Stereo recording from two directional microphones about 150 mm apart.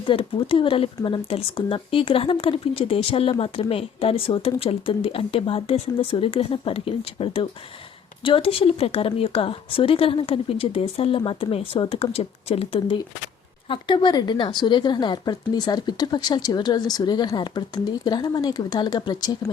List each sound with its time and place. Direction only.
0.0 s speech: 35° left (ahead or behind)